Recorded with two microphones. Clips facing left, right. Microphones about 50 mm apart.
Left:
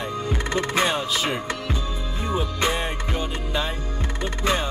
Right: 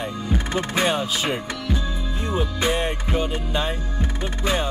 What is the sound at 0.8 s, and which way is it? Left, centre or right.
Music, centre.